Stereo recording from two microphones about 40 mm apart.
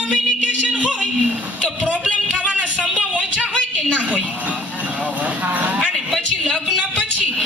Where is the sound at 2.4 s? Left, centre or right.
Right.